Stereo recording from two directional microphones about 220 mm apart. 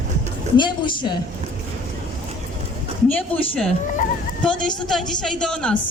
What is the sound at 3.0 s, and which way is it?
A woman's voice, 5° left (ahead or behind).